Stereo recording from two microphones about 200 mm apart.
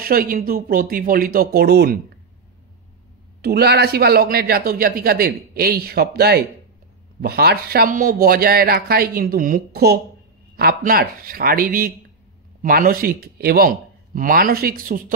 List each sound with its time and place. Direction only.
0.0 s speech: 45° right (ahead or behind)
3.4 s speech: 55° right (ahead or behind)